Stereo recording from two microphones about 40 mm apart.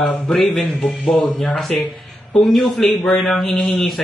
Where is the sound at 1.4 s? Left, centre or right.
Centre.